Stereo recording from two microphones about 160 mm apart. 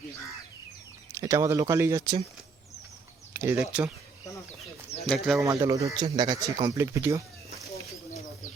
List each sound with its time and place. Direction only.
1.1 s speech: 20° right (ahead or behind)
3.3 s speech: 15° right (ahead or behind)
5.0 s speech: centre (ahead or behind)
5.4 s speech: 20° right (ahead or behind)